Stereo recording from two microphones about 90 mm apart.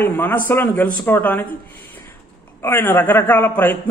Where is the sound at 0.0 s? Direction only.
20° left (ahead or behind).